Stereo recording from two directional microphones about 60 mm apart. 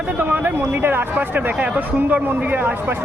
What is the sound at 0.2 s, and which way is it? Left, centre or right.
Speech, right.